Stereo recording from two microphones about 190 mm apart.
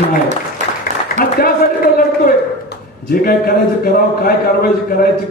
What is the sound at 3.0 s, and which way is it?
A man's voice, 50° left (ahead or behind).